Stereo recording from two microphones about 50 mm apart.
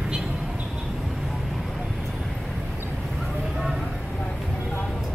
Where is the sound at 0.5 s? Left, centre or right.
Right.